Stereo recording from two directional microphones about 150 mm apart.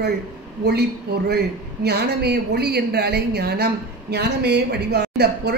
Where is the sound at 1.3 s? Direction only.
90° right.